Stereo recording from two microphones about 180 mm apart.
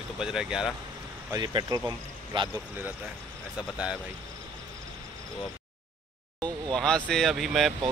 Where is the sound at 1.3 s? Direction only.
20° right (ahead or behind).